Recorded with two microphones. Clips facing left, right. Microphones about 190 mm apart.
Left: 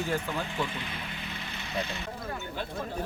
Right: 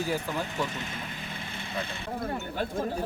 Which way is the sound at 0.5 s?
45° right (ahead or behind).